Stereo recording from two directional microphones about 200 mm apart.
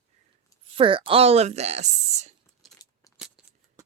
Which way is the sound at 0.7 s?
25° right (ahead or behind).